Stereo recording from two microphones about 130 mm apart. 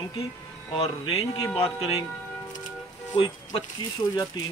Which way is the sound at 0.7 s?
50° left (ahead or behind).